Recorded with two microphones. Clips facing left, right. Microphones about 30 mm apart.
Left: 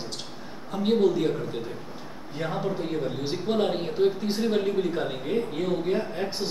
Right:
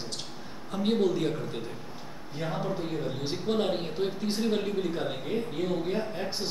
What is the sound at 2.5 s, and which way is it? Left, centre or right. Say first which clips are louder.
A man's voice: left 3 dB; centre.